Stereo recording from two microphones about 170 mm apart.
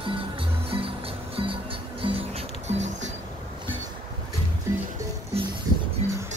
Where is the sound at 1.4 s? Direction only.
30° right (ahead or behind).